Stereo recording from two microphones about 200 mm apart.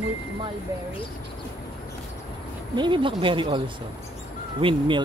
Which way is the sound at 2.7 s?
25° right (ahead or behind).